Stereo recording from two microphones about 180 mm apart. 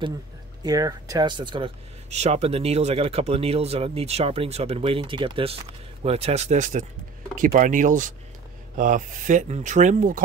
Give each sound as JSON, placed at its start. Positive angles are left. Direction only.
{"t": 0.6, "sound": "speech", "side_deg": -20}
{"t": 2.0, "sound": "speech", "side_deg": -40}